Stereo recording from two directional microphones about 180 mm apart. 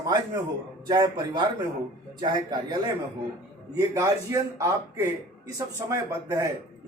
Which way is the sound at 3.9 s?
15° right (ahead or behind).